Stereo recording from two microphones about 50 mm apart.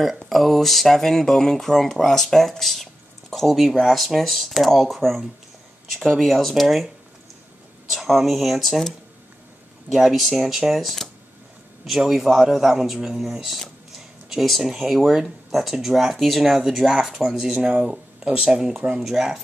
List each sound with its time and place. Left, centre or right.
0.3 s speech: centre
7.9 s speech: centre
9.9 s speech: centre
17.6 s speech: right